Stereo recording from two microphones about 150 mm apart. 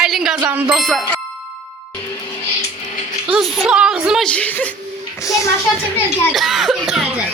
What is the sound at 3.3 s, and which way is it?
Music, 5° right (ahead or behind).